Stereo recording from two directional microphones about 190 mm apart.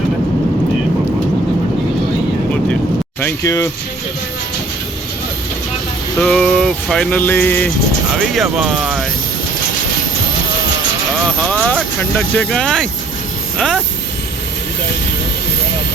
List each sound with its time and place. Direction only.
3.2 s speech: 15° left (ahead or behind)
6.1 s speech: 5° left (ahead or behind)
11.3 s speech: 5° left (ahead or behind)